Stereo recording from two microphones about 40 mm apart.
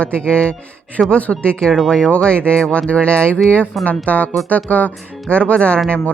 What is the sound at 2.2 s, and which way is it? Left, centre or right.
Speech, left.